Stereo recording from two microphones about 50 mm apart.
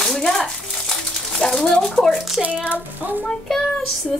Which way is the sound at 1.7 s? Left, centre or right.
Centre.